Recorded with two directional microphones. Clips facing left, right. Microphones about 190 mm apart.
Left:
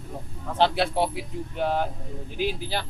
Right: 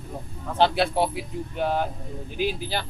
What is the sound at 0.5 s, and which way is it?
Speech, 10° right (ahead or behind).